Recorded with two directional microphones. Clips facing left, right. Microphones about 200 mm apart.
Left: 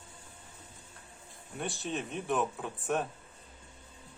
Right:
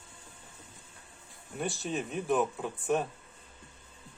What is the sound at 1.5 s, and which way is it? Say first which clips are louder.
Speech: right 2 dB; centre (ahead or behind).